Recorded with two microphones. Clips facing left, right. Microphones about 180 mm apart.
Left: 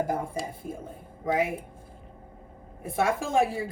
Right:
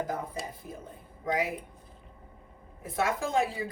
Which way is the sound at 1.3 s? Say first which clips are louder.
Left 4 dB; 25° left (ahead or behind).